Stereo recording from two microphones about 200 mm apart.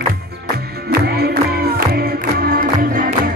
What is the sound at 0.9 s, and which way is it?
Music, 50° right (ahead or behind).